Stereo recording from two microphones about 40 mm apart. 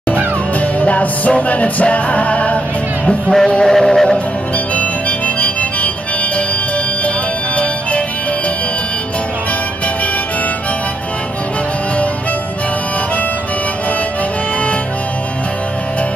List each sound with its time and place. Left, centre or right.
0.6 s music: left
3.3 s music: centre
4.7 s music: left